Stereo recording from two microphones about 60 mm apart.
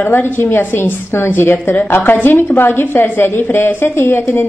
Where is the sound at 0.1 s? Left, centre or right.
Left.